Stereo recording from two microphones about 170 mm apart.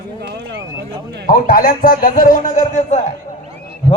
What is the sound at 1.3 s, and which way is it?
A man's voice, 55° left (ahead or behind).